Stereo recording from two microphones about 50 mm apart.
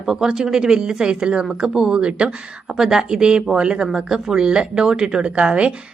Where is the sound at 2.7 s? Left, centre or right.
Centre.